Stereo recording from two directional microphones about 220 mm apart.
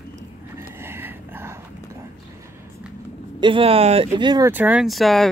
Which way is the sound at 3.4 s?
25° right (ahead or behind).